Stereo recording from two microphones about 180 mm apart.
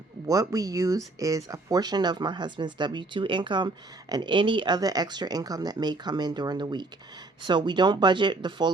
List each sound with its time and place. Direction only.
0.3 s speech: 20° right (ahead or behind)